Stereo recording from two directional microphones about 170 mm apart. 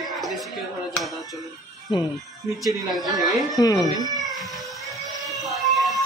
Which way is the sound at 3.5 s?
20° left (ahead or behind).